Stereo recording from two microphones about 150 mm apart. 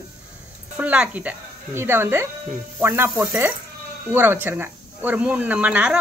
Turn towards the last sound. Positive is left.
turn(degrees=-10)  # may be behind; listen again after turning